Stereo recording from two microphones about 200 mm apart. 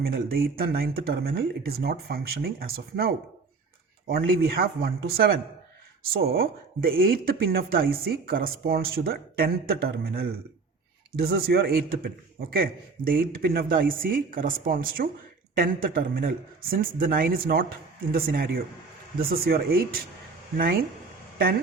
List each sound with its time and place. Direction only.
0.0 s speech: 50° right (ahead or behind)